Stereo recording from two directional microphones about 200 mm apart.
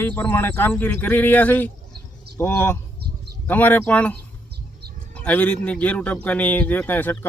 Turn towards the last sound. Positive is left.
turn(degrees=10)  # may be behind; listen again after turning